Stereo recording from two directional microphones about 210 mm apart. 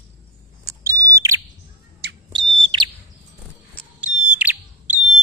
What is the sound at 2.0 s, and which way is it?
Bird, 50° right (ahead or behind).